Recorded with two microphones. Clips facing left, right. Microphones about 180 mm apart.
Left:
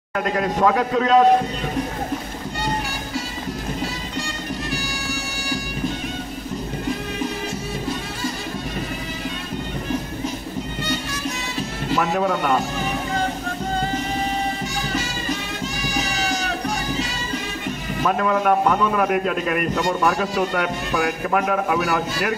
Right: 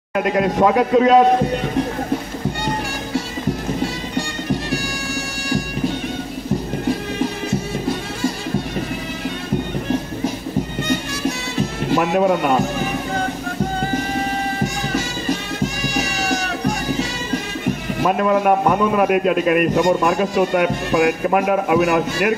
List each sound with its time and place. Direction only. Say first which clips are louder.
0.1 s a man's voice: right 4 dB; 15° right (ahead or behind)
11.9 s a man's voice: right 4 dB; 25° right (ahead or behind)
18.0 s a man's voice: right 3 dB; 20° right (ahead or behind)